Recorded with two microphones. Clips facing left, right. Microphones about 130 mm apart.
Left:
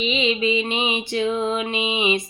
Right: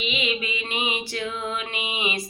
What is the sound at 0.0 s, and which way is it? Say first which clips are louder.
Music: left 7 dB; 30° left (ahead or behind).